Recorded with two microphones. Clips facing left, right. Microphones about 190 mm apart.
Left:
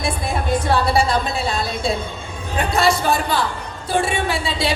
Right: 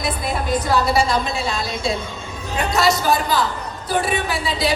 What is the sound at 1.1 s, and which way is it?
A woman's voice, 30° left (ahead or behind).